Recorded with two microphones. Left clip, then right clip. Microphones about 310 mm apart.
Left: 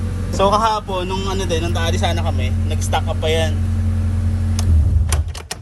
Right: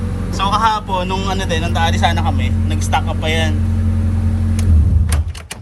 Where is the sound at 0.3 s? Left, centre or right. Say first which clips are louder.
Even; left.